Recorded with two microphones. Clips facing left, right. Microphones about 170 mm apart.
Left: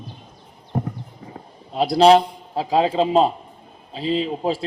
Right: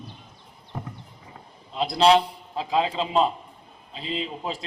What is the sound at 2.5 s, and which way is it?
Speech, 40° left (ahead or behind).